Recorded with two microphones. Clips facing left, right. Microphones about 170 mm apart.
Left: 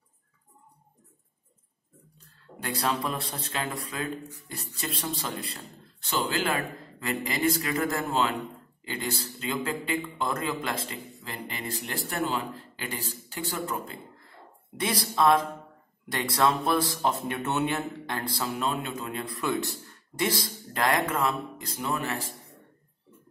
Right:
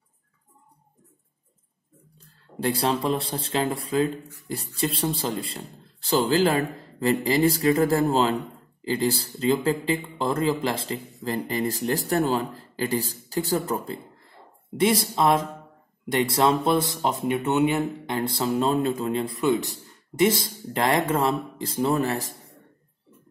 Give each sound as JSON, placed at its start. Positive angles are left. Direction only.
{"t": 2.1, "sound": "a man's voice", "side_deg": -30}
{"t": 14.8, "sound": "speech", "side_deg": -25}